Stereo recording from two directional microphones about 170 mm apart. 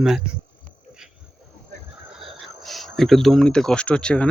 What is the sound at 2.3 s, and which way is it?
Speech, centre (ahead or behind).